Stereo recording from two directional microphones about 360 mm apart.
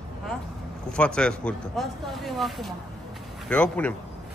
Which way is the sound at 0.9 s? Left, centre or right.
Centre.